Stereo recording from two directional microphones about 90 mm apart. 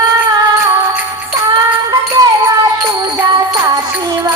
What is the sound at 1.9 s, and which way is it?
Music, 45° right (ahead or behind).